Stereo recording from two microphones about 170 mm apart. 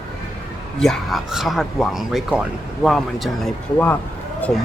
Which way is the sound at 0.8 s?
Centre (ahead or behind).